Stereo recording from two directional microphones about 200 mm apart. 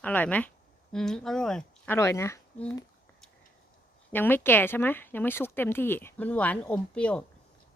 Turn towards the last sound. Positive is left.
turn(degrees=5)  # may be behind; listen again after turning